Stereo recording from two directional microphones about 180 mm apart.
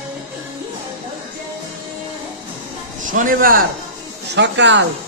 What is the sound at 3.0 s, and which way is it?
Speech, 45° right (ahead or behind).